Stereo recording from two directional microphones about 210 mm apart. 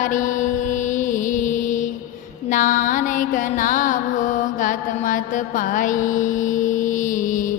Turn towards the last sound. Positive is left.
turn(degrees=40)  # may be behind; listen again after turning